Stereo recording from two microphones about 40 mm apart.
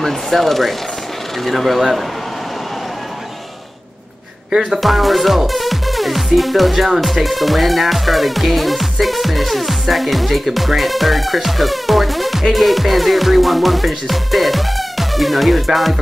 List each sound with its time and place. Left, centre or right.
0.0 s speech: centre
4.5 s speech: centre
4.7 s speech: centre